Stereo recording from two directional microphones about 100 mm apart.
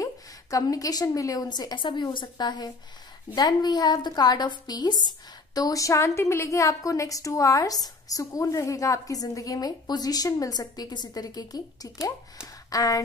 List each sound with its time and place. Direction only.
0.0 s a woman's voice: 35° left (ahead or behind)